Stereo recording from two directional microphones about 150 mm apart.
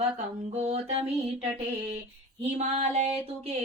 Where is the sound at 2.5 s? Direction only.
45° right (ahead or behind).